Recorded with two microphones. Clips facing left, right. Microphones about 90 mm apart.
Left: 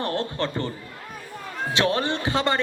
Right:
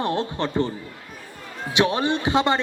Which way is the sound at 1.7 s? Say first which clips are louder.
Right 3 dB; 20° right (ahead or behind).